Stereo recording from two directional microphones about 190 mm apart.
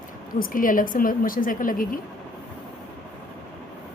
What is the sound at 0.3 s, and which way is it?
A woman's voice, 50° left (ahead or behind).